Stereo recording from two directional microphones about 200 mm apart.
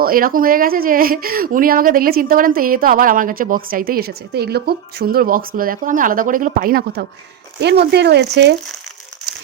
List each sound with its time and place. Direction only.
0.0 s speech: 45° right (ahead or behind)